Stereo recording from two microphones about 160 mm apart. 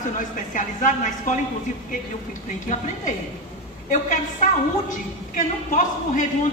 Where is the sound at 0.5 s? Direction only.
55° left (ahead or behind).